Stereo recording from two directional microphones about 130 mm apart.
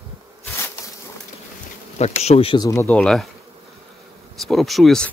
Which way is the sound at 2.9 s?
5° left (ahead or behind).